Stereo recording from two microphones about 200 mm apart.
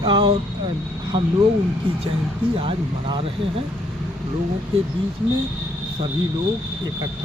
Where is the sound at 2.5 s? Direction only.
25° right (ahead or behind).